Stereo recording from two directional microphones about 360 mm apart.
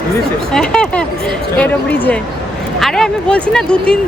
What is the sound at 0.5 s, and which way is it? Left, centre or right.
Speech, centre.